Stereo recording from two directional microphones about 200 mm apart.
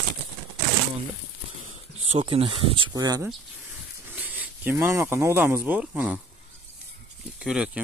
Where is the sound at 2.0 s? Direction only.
30° right (ahead or behind).